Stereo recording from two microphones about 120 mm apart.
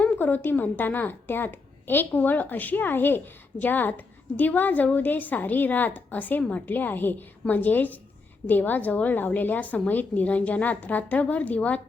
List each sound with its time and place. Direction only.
0.0 s a woman's voice: 15° left (ahead or behind)